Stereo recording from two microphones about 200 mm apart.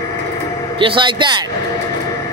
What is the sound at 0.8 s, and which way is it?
Speech, 25° right (ahead or behind).